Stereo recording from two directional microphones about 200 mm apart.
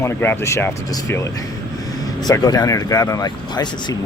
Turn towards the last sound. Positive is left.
turn(degrees=20)  # may be behind; listen again after turning